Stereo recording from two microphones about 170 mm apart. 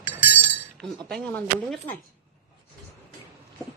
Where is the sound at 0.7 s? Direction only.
Centre (ahead or behind).